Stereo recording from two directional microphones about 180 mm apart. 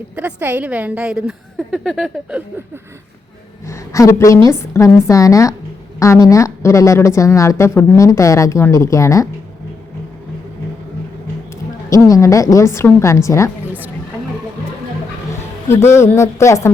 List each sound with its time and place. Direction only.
0.2 s a woman's voice: 10° right (ahead or behind)
3.7 s a woman's voice: 15° left (ahead or behind)
11.9 s a woman's voice: 20° left (ahead or behind)
15.7 s a woman's voice: 15° left (ahead or behind)